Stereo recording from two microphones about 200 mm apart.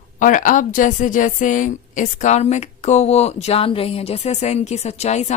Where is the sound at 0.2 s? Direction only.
40° left (ahead or behind).